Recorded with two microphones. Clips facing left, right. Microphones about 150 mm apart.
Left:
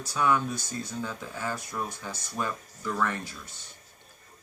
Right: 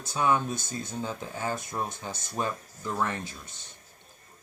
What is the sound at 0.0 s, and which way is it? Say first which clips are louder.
Speech: even; 20° right (ahead or behind).